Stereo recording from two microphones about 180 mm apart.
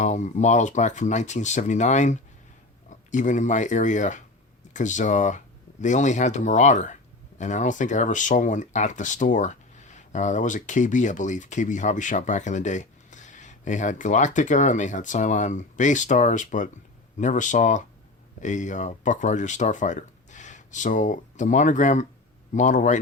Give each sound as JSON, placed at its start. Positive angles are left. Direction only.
{"t": 0.0, "sound": "speech", "side_deg": 40}